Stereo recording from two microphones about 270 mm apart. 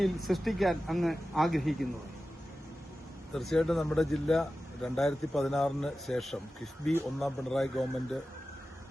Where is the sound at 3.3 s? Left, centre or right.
Centre.